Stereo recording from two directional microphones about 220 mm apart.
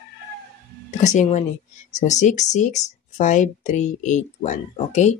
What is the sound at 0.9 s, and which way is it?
Speech, 30° left (ahead or behind).